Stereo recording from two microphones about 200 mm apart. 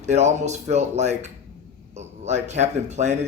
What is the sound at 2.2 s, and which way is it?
Speech, 35° right (ahead or behind).